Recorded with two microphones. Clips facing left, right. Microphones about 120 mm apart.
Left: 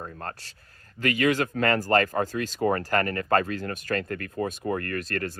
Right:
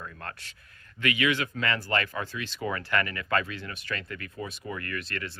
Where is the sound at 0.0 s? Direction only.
35° left (ahead or behind).